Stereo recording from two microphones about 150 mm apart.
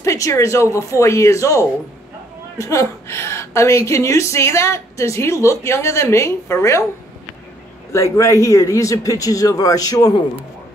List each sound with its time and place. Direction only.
0.0 s a woman's voice: 20° left (ahead or behind)
7.9 s a woman's voice: 20° left (ahead or behind)